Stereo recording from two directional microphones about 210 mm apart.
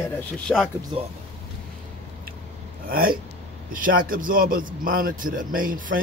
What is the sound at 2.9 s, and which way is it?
A man's voice, 45° right (ahead or behind).